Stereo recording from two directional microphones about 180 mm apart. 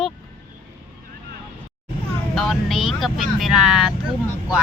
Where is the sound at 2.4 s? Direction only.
Centre (ahead or behind).